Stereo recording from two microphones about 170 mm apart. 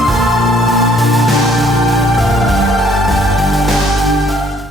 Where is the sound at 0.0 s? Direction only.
Centre (ahead or behind).